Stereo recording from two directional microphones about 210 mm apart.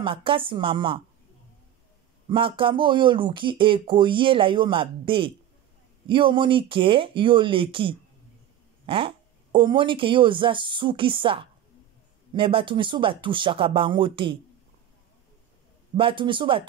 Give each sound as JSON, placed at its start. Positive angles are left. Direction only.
{"t": 0.0, "sound": "speech", "side_deg": -25}
{"t": 2.2, "sound": "speech", "side_deg": -25}
{"t": 16.0, "sound": "speech", "side_deg": -25}